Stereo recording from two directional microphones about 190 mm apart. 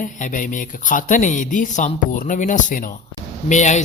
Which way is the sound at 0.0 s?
40° left (ahead or behind).